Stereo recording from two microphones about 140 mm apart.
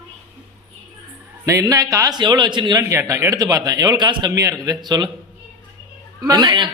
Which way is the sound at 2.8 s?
20° right (ahead or behind).